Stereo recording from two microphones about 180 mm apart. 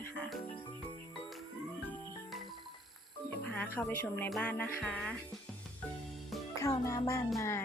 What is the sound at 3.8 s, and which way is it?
Speech, 5° left (ahead or behind).